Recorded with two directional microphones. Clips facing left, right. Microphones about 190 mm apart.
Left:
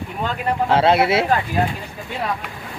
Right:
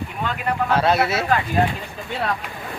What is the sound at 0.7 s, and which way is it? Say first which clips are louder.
Speech: left 4 dB; 25° left (ahead or behind).